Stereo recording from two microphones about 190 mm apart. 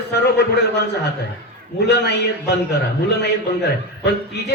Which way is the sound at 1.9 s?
60° left (ahead or behind).